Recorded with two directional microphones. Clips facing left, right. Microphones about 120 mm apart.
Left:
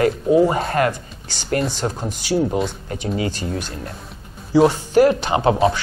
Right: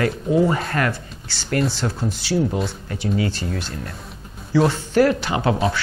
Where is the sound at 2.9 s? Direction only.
25° left (ahead or behind).